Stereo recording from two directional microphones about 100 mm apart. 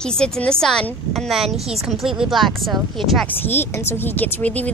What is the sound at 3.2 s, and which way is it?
Speech, 20° left (ahead or behind).